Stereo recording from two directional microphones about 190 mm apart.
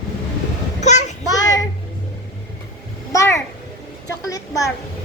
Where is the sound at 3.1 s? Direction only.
15° left (ahead or behind).